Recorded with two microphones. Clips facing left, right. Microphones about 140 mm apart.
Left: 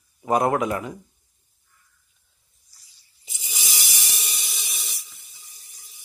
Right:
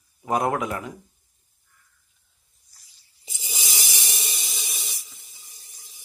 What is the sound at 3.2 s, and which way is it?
Rub, 25° right (ahead or behind).